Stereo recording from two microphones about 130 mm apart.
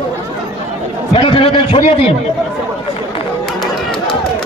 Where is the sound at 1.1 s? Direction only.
45° left (ahead or behind).